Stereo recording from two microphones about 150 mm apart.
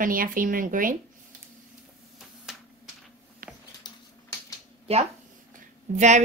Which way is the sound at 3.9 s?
30° left (ahead or behind).